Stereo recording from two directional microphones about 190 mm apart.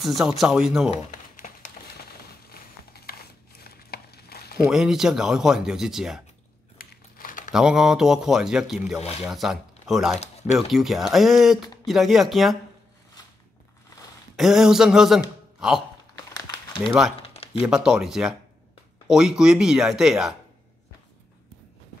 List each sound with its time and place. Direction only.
0.0 s speech: centre (ahead or behind)
1.3 s a sound: 45° left (ahead or behind)
4.6 s speech: 5° right (ahead or behind)
6.8 s crumpling: 45° left (ahead or behind)
7.5 s speech: 5° right (ahead or behind)
14.3 s speech: centre (ahead or behind)
16.8 s speech: 5° right (ahead or behind)
17.2 s a sound: 30° left (ahead or behind)
17.6 s speech: 5° right (ahead or behind)